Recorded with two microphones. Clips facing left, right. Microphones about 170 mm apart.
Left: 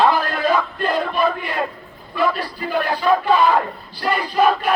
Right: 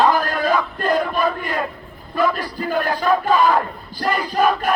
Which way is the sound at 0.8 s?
45° right (ahead or behind).